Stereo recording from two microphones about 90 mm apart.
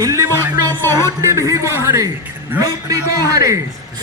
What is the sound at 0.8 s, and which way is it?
Speech, 30° left (ahead or behind).